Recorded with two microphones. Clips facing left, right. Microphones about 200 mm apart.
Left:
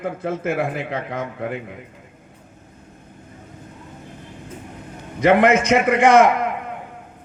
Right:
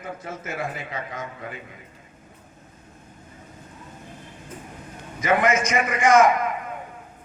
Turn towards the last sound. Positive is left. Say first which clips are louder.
# left 3 dB
turn(degrees=65)  # may be behind; listen again after turning